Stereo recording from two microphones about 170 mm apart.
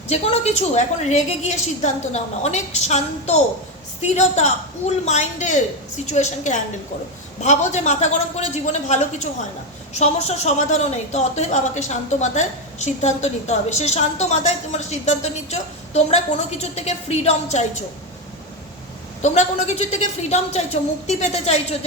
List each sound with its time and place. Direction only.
0.1 s a woman's voice: 40° left (ahead or behind)
19.2 s a woman's voice: 40° left (ahead or behind)